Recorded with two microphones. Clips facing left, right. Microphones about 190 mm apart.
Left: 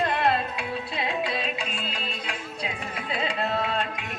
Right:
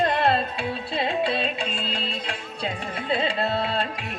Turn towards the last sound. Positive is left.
turn(degrees=-30)  # may be behind; listen again after turning